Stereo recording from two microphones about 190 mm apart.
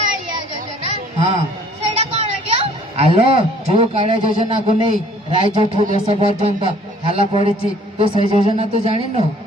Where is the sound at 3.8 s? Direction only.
30° right (ahead or behind).